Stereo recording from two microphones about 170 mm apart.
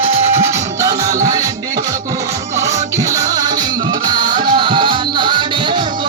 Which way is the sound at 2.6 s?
20° right (ahead or behind).